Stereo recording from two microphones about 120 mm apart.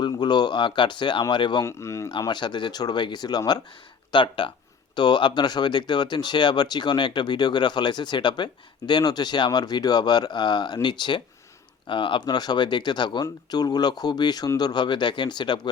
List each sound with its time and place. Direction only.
0.0 s speech: 40° left (ahead or behind)
1.6 s speech: 25° left (ahead or behind)
2.2 s speech: 40° left (ahead or behind)